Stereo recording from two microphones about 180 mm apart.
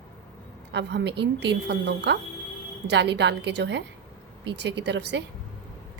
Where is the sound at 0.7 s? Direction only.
70° right (ahead or behind).